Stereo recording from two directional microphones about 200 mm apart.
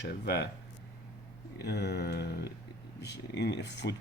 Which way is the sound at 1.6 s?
55° left (ahead or behind).